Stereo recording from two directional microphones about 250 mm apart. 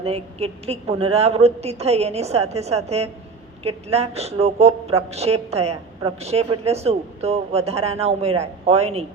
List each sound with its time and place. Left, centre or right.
0.0 s a man's voice: right